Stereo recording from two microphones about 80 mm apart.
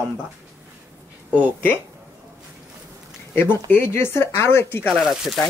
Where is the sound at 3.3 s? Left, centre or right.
Left.